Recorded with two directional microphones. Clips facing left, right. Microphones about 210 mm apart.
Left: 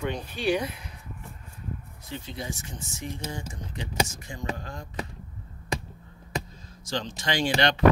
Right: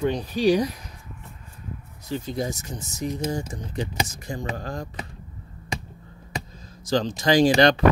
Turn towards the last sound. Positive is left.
turn(degrees=-40)  # may be behind; listen again after turning